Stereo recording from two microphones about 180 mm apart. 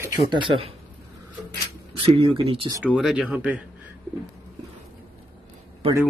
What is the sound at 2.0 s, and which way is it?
Speech, 30° right (ahead or behind).